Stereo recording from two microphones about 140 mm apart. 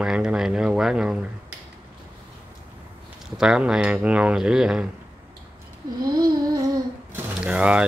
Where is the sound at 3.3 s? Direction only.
5° right (ahead or behind).